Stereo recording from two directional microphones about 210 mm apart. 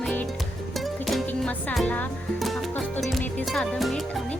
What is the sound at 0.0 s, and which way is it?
Music, 5° left (ahead or behind).